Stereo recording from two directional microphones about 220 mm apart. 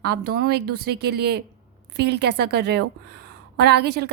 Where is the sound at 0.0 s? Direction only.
45° right (ahead or behind).